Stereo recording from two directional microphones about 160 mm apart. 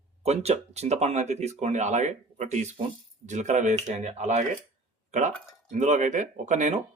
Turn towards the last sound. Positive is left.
turn(degrees=-50)  # may be behind; listen again after turning